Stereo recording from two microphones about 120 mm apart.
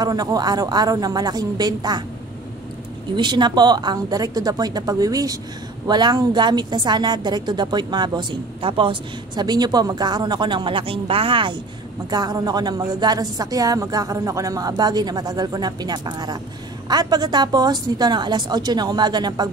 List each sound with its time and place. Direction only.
0.0 s a woman's voice: 30° right (ahead or behind)
3.2 s a woman's voice: 40° right (ahead or behind)
12.1 s a woman's voice: 35° right (ahead or behind)